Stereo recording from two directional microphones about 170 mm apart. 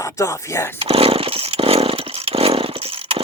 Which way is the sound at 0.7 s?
35° right (ahead or behind).